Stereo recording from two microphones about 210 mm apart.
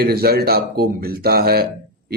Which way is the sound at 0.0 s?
45° right (ahead or behind).